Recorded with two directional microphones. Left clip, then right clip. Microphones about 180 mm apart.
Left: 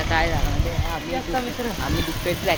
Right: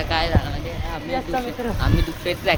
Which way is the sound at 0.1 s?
25° right (ahead or behind).